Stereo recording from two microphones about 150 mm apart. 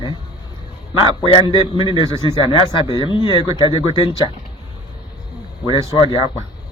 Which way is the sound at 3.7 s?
35° left (ahead or behind).